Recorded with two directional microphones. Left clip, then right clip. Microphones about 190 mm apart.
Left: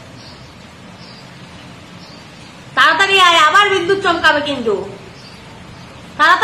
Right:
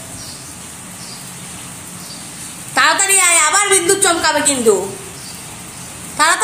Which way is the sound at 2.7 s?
30° right (ahead or behind).